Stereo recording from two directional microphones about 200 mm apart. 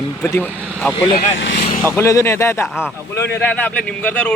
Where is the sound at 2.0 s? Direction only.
15° left (ahead or behind).